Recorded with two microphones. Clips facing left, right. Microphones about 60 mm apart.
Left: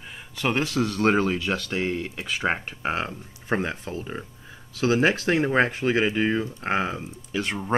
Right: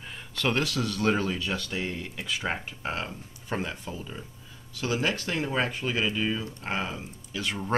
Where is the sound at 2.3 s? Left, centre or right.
Left.